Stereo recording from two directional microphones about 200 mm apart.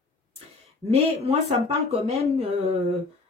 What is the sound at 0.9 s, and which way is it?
Speech, 30° right (ahead or behind).